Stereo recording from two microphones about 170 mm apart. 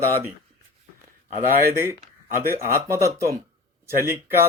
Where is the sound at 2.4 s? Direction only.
15° right (ahead or behind).